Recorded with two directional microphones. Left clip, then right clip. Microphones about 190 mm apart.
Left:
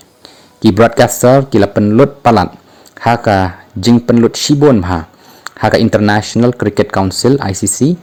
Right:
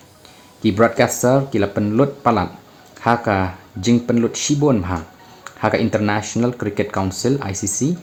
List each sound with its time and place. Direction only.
0.6 s speech: 45° left (ahead or behind)